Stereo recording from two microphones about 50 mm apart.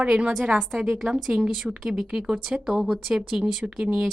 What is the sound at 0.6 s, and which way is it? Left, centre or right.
Speech, centre.